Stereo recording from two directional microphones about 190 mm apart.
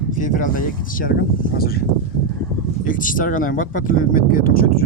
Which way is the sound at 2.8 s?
45° left (ahead or behind).